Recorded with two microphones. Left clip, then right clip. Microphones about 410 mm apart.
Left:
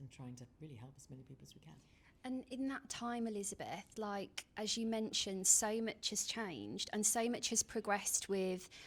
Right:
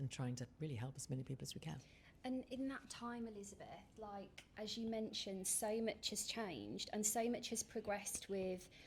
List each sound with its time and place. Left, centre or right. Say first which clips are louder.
0.2 s speech: right 4 dB; right
2.2 s a woman's voice: left 2 dB; centre; by 4.4 s left
4.5 s a woman's voice: left 5 dB; left